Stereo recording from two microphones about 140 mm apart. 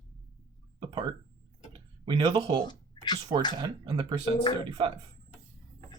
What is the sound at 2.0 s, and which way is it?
Speech, 35° right (ahead or behind).